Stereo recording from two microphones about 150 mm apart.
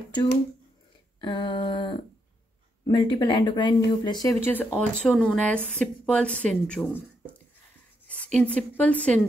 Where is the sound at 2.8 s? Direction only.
35° left (ahead or behind).